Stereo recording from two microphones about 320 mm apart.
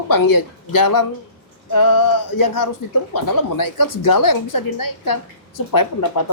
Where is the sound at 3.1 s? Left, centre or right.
Left.